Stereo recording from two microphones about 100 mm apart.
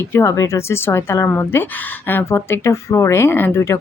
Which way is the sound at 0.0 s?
25° left (ahead or behind).